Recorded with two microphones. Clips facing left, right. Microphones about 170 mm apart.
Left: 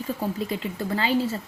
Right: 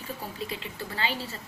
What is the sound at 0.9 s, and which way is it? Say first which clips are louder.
Speech: left 9 dB; 40° left (ahead or behind).